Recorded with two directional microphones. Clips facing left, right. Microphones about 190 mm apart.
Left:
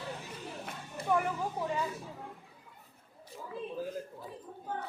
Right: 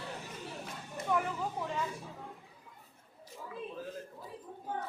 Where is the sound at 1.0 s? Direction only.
35° left (ahead or behind).